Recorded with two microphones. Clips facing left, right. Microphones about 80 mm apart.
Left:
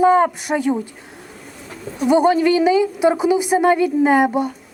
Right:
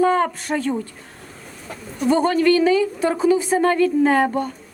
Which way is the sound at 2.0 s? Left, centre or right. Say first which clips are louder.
Left 3 dB; centre.